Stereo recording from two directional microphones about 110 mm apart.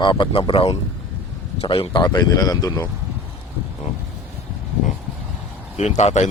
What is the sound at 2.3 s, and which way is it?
Speech, 35° left (ahead or behind).